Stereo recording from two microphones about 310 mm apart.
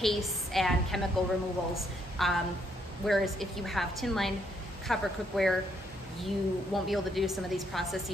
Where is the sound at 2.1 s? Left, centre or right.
Centre.